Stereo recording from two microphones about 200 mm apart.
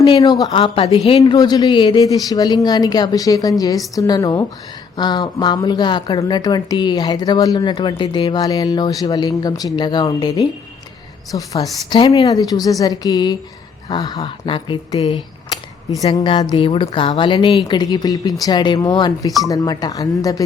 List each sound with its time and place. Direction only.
0.0 s a woman's voice: 20° left (ahead or behind)